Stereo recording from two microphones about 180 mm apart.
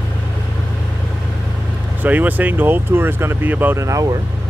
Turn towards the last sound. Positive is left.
turn(degrees=-20)  # may be behind; listen again after turning